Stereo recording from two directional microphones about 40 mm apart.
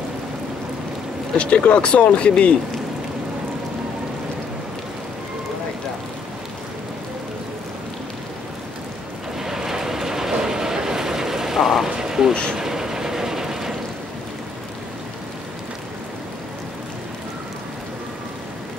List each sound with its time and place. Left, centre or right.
1.3 s speech: left
9.4 s vehicle: centre
12.5 s mechanisms: centre